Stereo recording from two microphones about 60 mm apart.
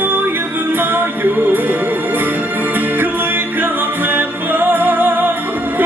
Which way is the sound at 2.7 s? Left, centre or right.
Right.